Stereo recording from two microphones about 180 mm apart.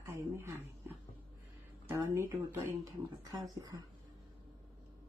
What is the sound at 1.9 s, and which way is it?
A woman's voice, 15° right (ahead or behind).